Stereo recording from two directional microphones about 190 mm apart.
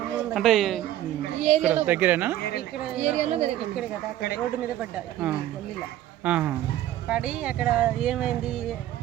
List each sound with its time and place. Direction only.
0.3 s speech: centre (ahead or behind)
1.4 s a woman's voice: 35° right (ahead or behind)
1.6 s speech: 10° right (ahead or behind)
3.0 s a woman's voice: 35° right (ahead or behind)
4.8 s speech: 5° right (ahead or behind)